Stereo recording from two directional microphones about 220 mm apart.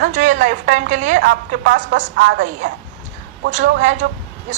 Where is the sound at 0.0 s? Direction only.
35° right (ahead or behind).